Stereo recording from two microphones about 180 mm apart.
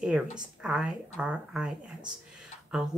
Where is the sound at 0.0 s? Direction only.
5° right (ahead or behind).